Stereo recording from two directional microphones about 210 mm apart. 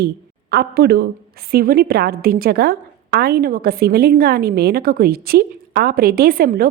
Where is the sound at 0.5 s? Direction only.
50° right (ahead or behind).